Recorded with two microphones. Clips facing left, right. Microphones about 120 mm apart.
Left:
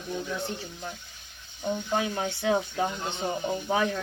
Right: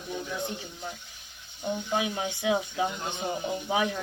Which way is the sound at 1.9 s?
10° right (ahead or behind).